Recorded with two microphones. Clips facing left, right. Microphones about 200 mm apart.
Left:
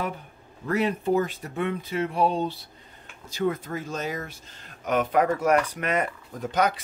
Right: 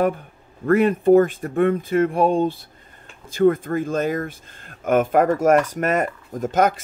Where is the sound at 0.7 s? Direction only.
55° right (ahead or behind).